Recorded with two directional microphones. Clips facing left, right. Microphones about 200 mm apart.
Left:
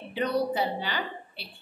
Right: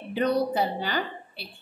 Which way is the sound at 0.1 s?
45° right (ahead or behind).